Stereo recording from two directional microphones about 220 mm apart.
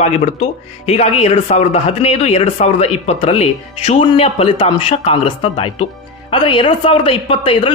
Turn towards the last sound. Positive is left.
turn(degrees=25)  # may be behind; listen again after turning